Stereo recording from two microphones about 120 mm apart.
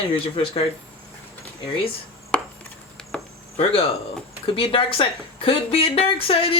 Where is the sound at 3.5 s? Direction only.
55° left (ahead or behind).